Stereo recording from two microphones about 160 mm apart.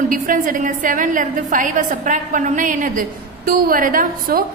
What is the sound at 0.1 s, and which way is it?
A woman's voice, 60° right (ahead or behind).